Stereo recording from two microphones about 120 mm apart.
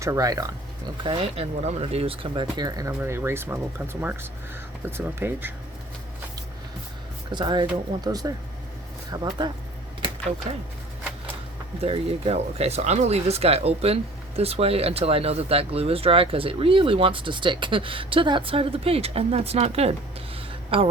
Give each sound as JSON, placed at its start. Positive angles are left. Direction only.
{"t": 0.0, "sound": "speech", "side_deg": -25}
{"t": 1.0, "sound": "speech", "side_deg": -50}
{"t": 3.0, "sound": "speech", "side_deg": -20}
{"t": 4.9, "sound": "speech", "side_deg": -20}
{"t": 7.3, "sound": "speech", "side_deg": -40}
{"t": 11.8, "sound": "speech", "side_deg": -55}
{"t": 20.5, "sound": "a sound", "side_deg": -50}